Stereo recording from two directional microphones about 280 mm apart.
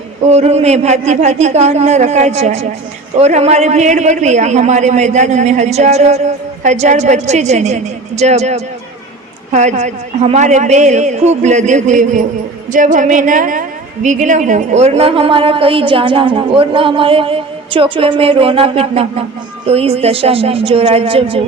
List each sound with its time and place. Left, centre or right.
0.3 s a woman's voice: right